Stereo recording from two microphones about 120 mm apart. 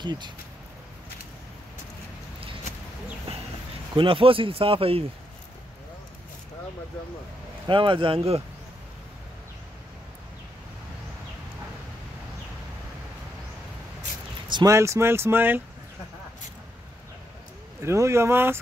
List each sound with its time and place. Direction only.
0.0 s speech: 40° right (ahead or behind)
3.3 s a sound: 55° right (ahead or behind)
3.9 s speech: 45° right (ahead or behind)
7.6 s speech: 45° right (ahead or behind)
14.5 s speech: 30° right (ahead or behind)
17.8 s speech: 25° right (ahead or behind)